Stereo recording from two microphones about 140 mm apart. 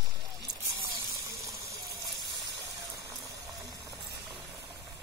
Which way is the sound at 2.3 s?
30° right (ahead or behind).